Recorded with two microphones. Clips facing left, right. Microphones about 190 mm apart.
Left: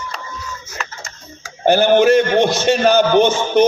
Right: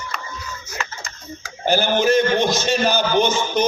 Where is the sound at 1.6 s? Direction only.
60° left (ahead or behind).